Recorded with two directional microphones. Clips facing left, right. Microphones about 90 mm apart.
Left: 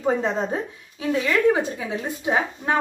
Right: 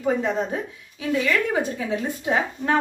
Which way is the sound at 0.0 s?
30° left (ahead or behind).